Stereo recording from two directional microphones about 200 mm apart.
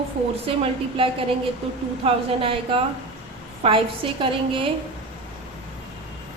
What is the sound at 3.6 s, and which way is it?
A woman's voice, 25° right (ahead or behind).